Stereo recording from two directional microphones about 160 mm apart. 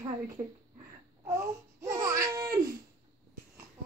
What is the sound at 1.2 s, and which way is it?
Babbling, 20° right (ahead or behind).